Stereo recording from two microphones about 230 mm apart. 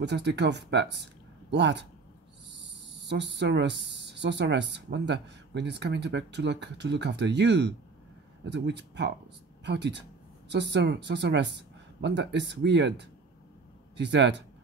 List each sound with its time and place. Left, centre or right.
0.0 s speech: right
3.1 s speech: right
13.9 s speech: right